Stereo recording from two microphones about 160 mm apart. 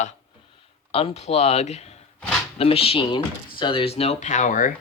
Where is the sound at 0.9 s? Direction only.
35° left (ahead or behind).